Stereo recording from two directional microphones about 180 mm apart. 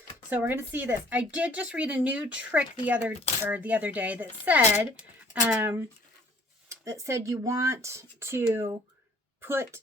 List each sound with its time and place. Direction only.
0.3 s speech: 10° right (ahead or behind)